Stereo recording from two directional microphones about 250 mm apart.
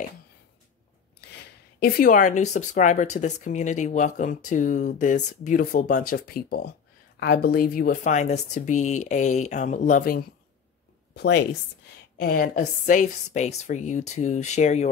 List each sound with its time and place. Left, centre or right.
1.8 s a woman's voice: left